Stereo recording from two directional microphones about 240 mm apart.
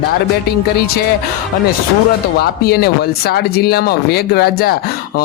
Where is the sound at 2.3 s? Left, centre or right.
Left.